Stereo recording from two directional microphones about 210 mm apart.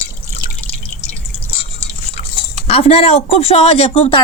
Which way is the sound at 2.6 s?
30° left (ahead or behind).